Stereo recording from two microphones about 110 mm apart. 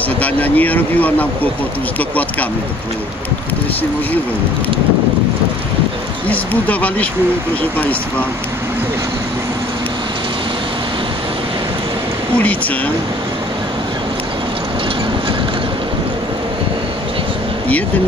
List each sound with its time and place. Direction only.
0.2 s speech: 15° left (ahead or behind)
6.2 s speech: 15° left (ahead or behind)
12.4 s speech: 15° left (ahead or behind)